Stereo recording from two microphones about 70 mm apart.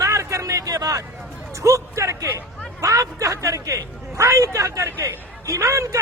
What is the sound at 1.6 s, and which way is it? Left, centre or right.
Speech, right.